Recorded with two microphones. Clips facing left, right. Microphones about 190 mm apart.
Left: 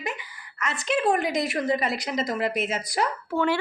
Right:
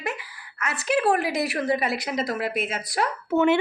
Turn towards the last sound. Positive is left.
turn(degrees=-20)  # may be behind; listen again after turning